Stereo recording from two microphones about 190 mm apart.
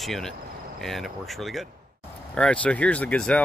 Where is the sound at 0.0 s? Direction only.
Centre (ahead or behind).